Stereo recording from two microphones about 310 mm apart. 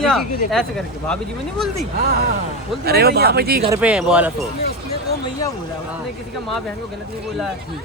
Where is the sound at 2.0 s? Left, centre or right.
Right.